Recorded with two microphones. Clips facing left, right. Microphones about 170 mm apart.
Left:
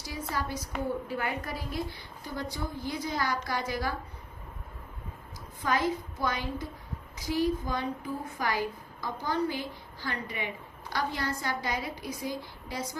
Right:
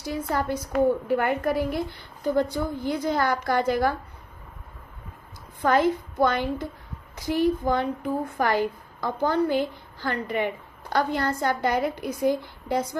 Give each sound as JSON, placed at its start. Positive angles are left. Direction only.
{"t": 0.0, "sound": "a woman's voice", "side_deg": -55}
{"t": 5.6, "sound": "a woman's voice", "side_deg": -55}